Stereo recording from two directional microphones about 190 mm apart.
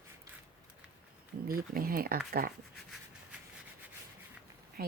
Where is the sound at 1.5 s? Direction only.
50° right (ahead or behind).